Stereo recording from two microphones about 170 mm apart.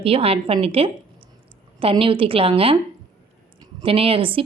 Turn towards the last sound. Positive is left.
turn(degrees=-30)  # may be behind; listen again after turning